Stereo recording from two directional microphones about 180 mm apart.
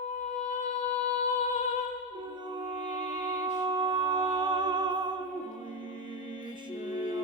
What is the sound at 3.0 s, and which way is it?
Music, 25° right (ahead or behind).